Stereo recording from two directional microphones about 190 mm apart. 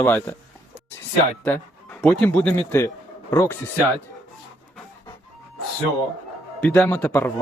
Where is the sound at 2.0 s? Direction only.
10° left (ahead or behind).